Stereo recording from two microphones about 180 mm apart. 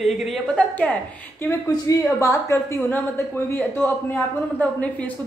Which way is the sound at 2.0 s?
15° left (ahead or behind).